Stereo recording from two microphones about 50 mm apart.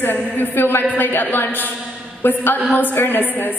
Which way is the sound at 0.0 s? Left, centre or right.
Left.